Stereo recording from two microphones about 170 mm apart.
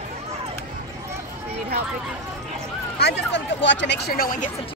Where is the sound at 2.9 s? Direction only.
80° left; by 4.5 s 50° left (ahead or behind).